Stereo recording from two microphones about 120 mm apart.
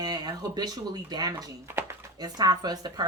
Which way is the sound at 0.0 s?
35° right (ahead or behind).